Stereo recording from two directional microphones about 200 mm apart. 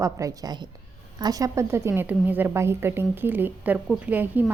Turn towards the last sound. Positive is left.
turn(degrees=-10)  # may be behind; listen again after turning